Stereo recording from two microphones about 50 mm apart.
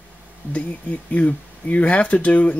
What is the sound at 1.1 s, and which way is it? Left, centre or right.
Speech, left.